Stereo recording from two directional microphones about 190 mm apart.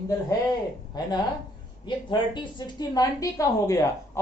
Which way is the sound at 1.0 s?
20° left (ahead or behind).